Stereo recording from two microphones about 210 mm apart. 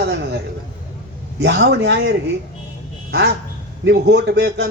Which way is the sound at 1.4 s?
55° right (ahead or behind).